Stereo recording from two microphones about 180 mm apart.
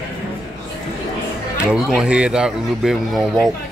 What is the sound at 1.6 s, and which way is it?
Speech, 5° right (ahead or behind).